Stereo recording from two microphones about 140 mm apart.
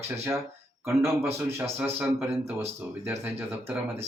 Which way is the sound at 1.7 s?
15° right (ahead or behind).